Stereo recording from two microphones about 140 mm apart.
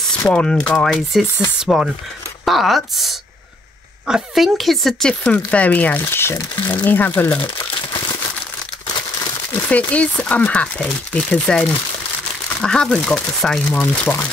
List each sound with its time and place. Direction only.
0.3 s speech: 5° left (ahead or behind)
7.4 s speech: 35° left (ahead or behind)
9.7 s speech: 10° left (ahead or behind)